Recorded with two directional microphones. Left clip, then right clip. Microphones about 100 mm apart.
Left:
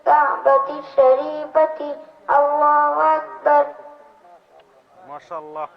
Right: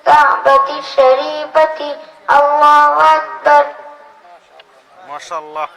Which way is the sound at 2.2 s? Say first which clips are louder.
Right 7 dB; 25° right (ahead or behind).